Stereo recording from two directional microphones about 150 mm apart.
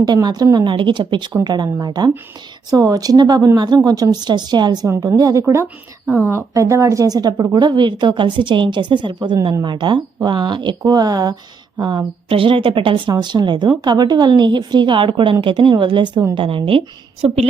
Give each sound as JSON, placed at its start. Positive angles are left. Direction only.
{"t": 0.0, "sound": "a woman's voice", "side_deg": -25}